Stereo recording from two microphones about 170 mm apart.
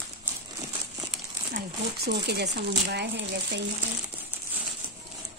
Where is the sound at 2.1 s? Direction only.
75° right (ahead or behind).